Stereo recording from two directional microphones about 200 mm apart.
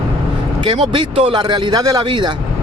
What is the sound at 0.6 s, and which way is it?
Speech, 25° right (ahead or behind).